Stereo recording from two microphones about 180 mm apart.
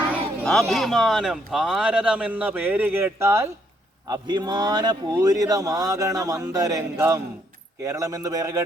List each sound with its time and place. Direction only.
0.4 s speech: centre (ahead or behind); by 8.6 s 20° right (ahead or behind)